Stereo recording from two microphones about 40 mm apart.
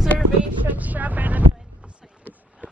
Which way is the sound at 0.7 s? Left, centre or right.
Right.